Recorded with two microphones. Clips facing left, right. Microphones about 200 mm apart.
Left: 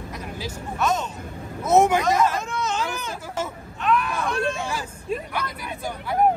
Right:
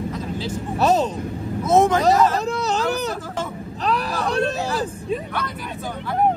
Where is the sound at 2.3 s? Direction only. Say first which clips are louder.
Right 5 dB; 35° right (ahead or behind).